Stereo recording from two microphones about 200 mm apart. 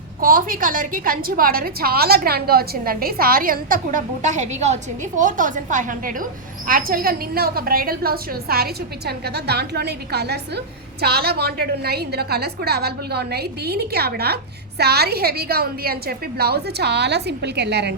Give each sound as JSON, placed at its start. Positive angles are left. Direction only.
{"t": 0.2, "sound": "a woman's voice", "side_deg": -45}